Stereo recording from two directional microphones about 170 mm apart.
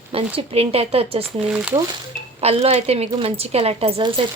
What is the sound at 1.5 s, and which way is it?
Speech, 5° right (ahead or behind).